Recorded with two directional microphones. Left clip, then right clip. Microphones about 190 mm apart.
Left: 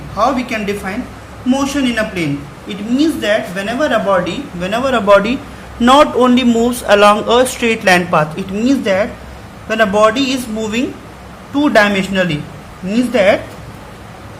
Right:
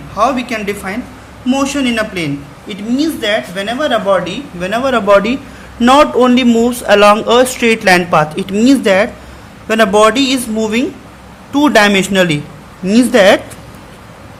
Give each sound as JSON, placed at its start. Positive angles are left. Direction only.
{"t": 0.2, "sound": "a woman's voice", "side_deg": -35}
{"t": 8.5, "sound": "speech", "side_deg": -35}
{"t": 11.5, "sound": "speech", "side_deg": -40}